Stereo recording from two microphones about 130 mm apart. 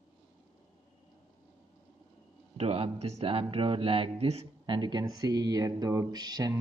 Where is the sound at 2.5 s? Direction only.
50° right (ahead or behind).